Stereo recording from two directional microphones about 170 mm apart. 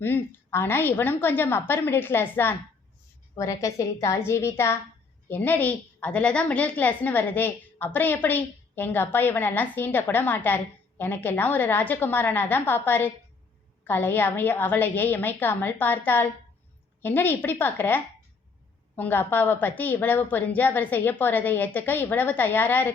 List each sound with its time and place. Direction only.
0.0 s a woman's voice: 10° left (ahead or behind)